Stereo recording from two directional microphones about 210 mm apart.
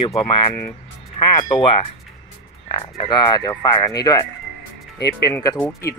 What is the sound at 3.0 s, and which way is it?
Speech, 20° left (ahead or behind).